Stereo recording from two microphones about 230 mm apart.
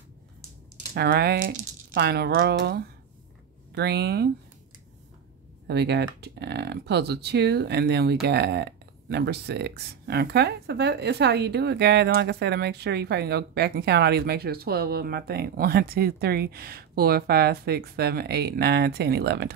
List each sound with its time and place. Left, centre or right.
0.9 s speech: right
5.7 s speech: right